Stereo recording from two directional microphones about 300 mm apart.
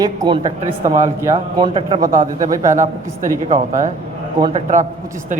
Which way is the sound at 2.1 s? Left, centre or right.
Right.